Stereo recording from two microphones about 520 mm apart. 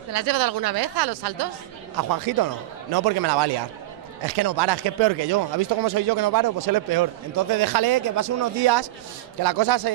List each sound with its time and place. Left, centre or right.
0.1 s a man's voice: right